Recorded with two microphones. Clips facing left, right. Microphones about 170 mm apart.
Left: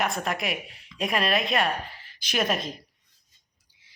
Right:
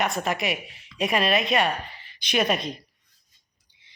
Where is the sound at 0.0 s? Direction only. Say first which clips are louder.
Right 2 dB; centre (ahead or behind).